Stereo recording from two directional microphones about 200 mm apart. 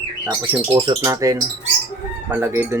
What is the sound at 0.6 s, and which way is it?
Speech, 30° right (ahead or behind).